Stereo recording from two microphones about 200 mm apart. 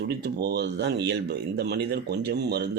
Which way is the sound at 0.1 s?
55° right (ahead or behind).